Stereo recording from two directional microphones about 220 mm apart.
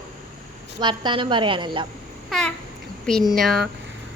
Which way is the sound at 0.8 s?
20° right (ahead or behind).